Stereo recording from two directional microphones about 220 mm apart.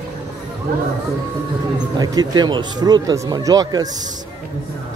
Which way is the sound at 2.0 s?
15° right (ahead or behind).